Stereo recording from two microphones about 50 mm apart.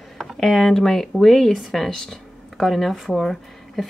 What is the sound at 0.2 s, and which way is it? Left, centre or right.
Speech, centre.